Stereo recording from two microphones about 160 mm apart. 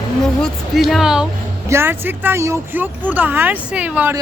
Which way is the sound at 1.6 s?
15° right (ahead or behind).